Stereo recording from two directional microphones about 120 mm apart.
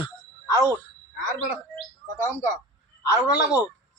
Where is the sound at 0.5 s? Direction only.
30° right (ahead or behind).